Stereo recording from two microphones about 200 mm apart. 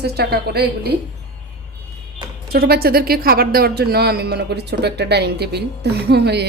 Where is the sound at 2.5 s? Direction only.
50° right (ahead or behind).